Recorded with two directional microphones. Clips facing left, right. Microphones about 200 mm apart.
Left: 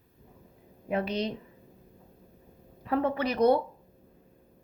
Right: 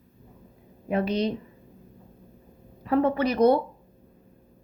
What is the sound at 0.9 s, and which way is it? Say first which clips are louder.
Speech: right 4 dB; 35° right (ahead or behind).